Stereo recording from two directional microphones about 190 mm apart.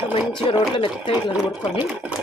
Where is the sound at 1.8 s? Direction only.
5° right (ahead or behind).